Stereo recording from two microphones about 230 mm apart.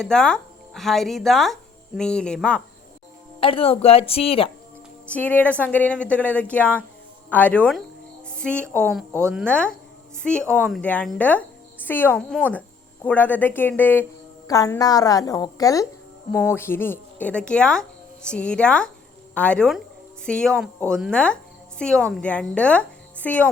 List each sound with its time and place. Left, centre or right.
0.0 s speech: centre
3.4 s speech: left
5.1 s a woman's voice: centre
9.4 s a woman's voice: centre